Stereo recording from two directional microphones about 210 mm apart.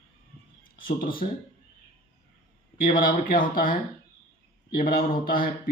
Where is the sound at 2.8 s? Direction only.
40° left (ahead or behind).